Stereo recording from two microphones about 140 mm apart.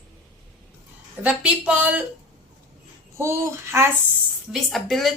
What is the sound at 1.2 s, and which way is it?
Speech, 10° right (ahead or behind).